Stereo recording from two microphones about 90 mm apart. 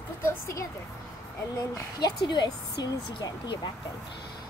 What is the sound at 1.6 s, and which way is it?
A woman's voice, 50° left (ahead or behind).